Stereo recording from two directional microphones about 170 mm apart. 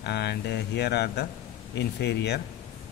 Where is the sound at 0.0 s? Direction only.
75° left (ahead or behind).